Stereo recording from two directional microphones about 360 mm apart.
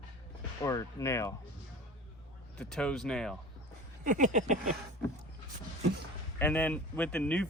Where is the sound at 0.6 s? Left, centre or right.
Centre.